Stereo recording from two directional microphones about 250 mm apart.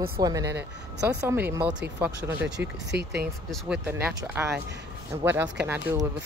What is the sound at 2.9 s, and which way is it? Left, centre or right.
Speech, right.